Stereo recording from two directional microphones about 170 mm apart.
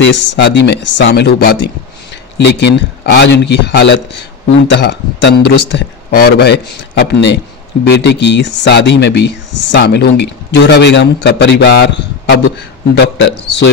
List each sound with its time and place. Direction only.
0.0 s speech: 90° left; by 1.6 s 70° left (ahead or behind)
2.3 s a man's voice: 90° left
9.8 s a man's voice: 75° left (ahead or behind)